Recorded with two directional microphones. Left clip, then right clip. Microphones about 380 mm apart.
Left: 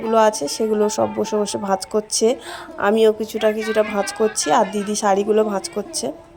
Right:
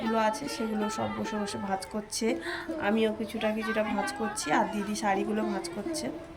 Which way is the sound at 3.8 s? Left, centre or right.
Left.